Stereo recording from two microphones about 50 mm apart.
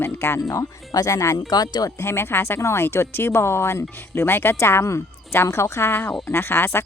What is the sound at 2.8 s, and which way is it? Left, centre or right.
Speech, left.